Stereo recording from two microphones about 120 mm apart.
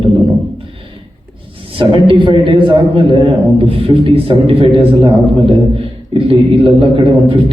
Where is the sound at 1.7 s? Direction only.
45° right (ahead or behind).